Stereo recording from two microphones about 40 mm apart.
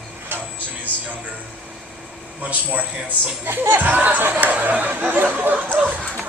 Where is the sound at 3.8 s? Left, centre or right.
Right.